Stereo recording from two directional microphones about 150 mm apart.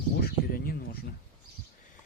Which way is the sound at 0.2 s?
85° left.